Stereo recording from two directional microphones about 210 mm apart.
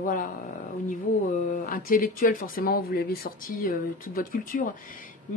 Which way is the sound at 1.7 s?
45° left (ahead or behind).